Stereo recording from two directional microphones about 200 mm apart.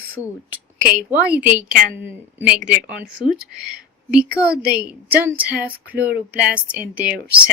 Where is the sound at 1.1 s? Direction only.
10° right (ahead or behind).